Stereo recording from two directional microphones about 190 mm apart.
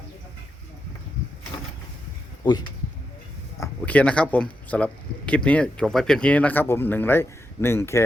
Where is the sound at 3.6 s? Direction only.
5° left (ahead or behind).